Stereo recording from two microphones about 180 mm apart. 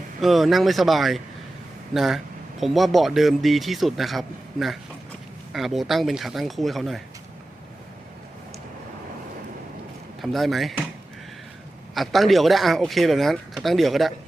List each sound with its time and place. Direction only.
0.2 s speech: centre (ahead or behind)
10.2 s speech: centre (ahead or behind)
11.9 s speech: centre (ahead or behind)